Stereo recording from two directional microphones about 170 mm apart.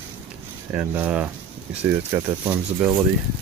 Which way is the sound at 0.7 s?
10° right (ahead or behind).